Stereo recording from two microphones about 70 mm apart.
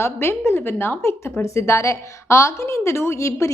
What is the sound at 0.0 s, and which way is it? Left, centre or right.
A woman's voice, left.